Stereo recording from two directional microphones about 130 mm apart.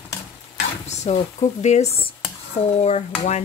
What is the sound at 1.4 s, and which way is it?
Speech, 60° left (ahead or behind).